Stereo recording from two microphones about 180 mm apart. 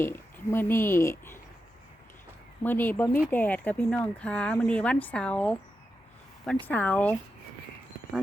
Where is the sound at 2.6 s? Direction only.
10° left (ahead or behind).